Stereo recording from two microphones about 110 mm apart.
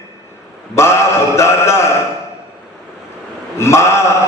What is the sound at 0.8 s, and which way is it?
A man's voice, 25° left (ahead or behind).